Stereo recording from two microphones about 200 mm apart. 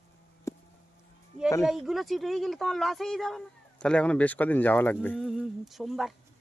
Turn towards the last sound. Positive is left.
turn(degrees=0)  # may be behind; listen again after turning